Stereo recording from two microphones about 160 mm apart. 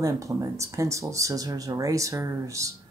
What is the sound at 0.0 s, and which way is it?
Speech, 20° right (ahead or behind).